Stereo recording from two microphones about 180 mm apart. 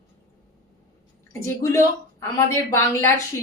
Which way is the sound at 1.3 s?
15° left (ahead or behind).